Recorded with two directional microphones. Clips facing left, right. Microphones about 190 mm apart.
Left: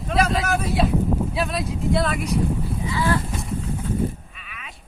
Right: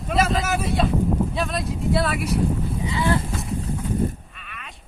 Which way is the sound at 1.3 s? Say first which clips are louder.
Left 1 dB; centre (ahead or behind).